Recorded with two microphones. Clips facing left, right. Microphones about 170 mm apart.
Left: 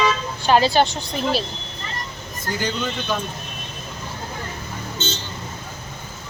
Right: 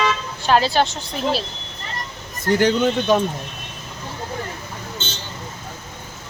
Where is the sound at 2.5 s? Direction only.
70° right (ahead or behind).